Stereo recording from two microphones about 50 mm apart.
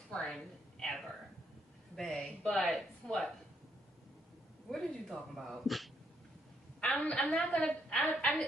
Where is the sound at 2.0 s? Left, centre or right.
Centre.